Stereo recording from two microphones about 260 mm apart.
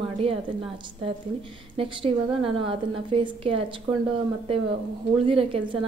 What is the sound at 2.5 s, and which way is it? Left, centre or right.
A woman's voice, right.